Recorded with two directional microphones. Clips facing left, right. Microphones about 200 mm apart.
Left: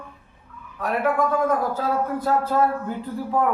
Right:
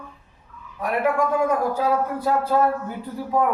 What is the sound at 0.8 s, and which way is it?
A man's voice, 15° right (ahead or behind).